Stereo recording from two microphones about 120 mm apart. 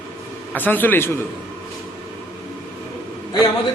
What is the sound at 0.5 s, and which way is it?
Speech, 15° left (ahead or behind).